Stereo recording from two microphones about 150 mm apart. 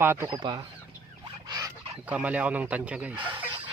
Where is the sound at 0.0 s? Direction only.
15° right (ahead or behind).